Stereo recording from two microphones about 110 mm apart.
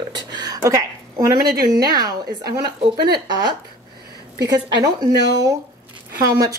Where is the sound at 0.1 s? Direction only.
40° right (ahead or behind).